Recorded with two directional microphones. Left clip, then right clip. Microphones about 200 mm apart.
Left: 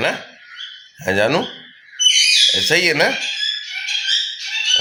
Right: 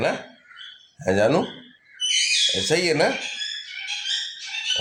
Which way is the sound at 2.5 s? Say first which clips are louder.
Left 6 dB; centre (ahead or behind).